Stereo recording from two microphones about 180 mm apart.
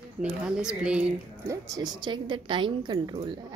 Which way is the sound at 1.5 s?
20° right (ahead or behind).